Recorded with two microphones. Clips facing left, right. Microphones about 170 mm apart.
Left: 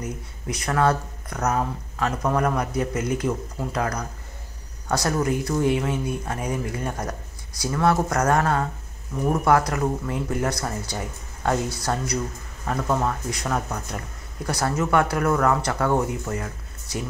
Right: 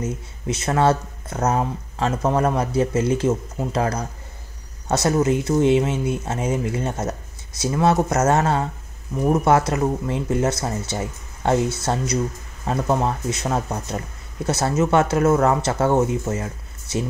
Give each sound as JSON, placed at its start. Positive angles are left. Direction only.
{"t": 0.0, "sound": "speech", "side_deg": -25}